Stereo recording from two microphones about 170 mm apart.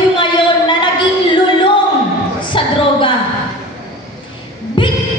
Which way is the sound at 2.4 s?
30° left (ahead or behind).